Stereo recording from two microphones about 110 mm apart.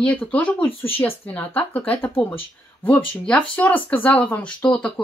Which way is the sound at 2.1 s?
55° left (ahead or behind).